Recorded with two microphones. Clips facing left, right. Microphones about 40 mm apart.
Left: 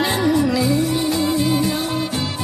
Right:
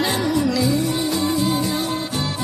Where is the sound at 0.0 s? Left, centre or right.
Centre.